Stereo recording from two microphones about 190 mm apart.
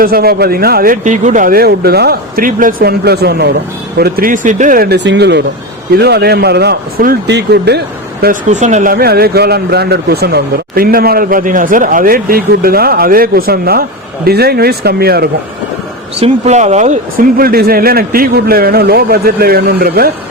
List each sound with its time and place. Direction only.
0.0 s speech: 50° right (ahead or behind)
8.2 s speech: 40° right (ahead or behind)
16.2 s speech: 35° right (ahead or behind); by 20.1 s 55° right (ahead or behind)